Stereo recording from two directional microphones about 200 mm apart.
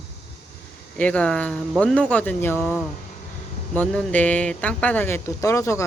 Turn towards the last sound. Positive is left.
turn(degrees=15)  # may be behind; listen again after turning